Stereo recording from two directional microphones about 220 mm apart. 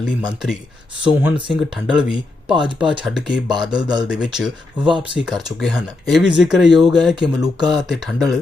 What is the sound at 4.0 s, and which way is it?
Speech, 5° right (ahead or behind).